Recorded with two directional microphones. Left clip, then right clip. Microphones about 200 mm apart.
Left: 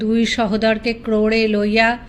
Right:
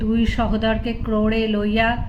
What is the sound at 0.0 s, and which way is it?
A woman's voice, 35° left (ahead or behind).